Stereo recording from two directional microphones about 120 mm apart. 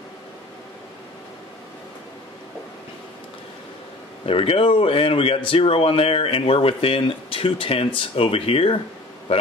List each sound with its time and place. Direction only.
4.3 s speech: 50° left (ahead or behind)